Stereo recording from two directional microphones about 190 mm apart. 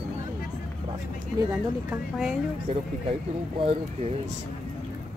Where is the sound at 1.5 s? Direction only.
5° right (ahead or behind).